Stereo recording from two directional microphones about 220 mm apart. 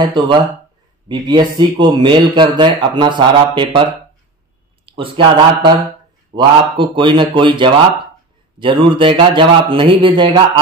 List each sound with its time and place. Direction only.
0.0 s speech: 20° right (ahead or behind)
4.8 s speech: 25° right (ahead or behind)